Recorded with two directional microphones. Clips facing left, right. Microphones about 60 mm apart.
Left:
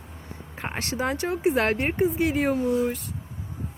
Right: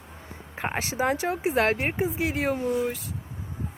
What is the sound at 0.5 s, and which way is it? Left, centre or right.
Speech, right.